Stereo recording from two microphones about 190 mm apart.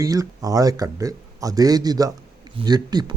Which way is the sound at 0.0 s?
20° right (ahead or behind).